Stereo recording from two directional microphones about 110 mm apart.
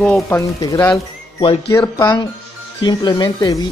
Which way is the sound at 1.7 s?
35° left (ahead or behind).